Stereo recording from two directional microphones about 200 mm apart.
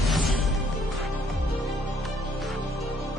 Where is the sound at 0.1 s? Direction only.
Centre (ahead or behind).